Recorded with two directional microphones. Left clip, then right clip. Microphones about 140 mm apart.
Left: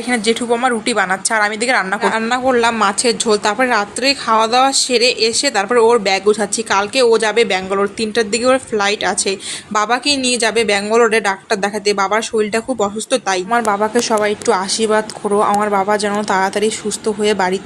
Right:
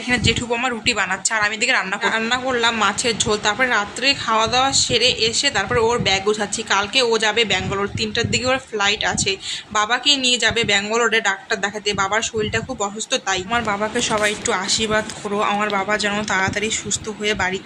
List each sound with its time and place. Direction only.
0.6 s a woman's voice: 40° left (ahead or behind)
15.4 s speech: 25° left (ahead or behind)